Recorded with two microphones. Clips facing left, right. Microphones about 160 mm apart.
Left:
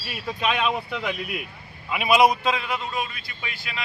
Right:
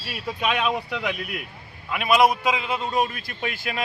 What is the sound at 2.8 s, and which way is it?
Speech, 40° right (ahead or behind).